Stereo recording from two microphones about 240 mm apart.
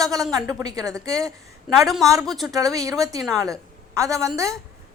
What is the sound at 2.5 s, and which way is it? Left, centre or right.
A woman's voice, centre.